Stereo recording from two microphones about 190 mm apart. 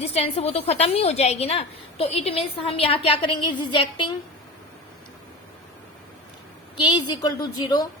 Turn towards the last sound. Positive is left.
turn(degrees=20)  # may be behind; listen again after turning